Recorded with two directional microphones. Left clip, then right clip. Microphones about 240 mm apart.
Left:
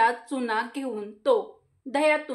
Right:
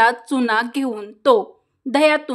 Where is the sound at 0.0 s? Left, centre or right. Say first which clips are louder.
Right 7 dB; right.